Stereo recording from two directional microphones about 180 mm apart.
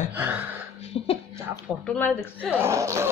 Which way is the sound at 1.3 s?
15° right (ahead or behind).